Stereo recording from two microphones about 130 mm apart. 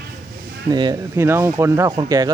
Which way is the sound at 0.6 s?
30° right (ahead or behind).